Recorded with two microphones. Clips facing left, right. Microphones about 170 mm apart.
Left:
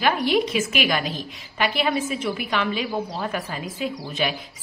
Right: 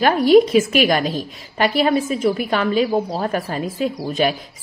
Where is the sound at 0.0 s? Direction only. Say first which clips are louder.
Right 9 dB; 40° right (ahead or behind).